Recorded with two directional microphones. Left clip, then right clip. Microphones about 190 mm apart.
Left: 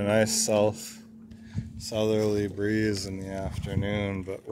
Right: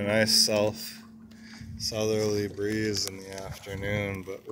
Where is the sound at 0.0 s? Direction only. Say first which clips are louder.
Right 1 dB; 25° left (ahead or behind).